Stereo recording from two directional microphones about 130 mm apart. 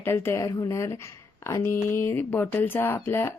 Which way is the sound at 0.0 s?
20° left (ahead or behind).